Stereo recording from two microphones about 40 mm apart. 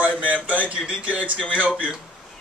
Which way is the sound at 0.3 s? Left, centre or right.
Right.